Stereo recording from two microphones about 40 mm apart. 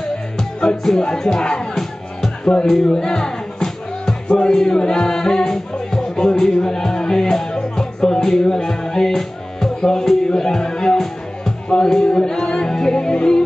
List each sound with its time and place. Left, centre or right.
0.4 s music: centre
1.4 s speech: centre
2.6 s music: centre